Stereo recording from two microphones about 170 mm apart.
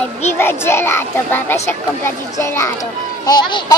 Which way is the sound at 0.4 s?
15° left (ahead or behind).